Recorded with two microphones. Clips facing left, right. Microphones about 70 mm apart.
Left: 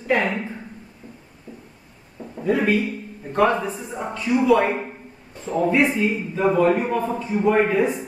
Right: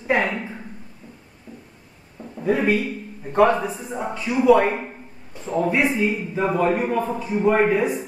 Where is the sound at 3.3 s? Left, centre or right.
Centre.